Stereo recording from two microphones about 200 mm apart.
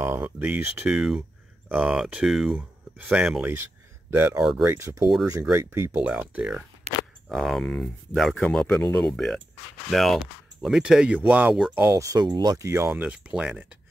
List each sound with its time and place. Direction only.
0.0 s speech: 10° right (ahead or behind)
6.9 s single-lens reflex camera: 35° right (ahead or behind)
7.2 s speech: centre (ahead or behind)